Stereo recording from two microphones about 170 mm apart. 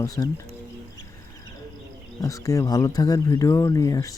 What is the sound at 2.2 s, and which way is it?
Speech, 20° left (ahead or behind).